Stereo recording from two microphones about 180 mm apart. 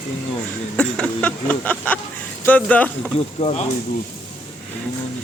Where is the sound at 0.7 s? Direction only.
5° left (ahead or behind).